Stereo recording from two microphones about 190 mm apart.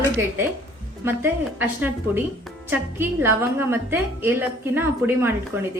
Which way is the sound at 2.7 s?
10° right (ahead or behind).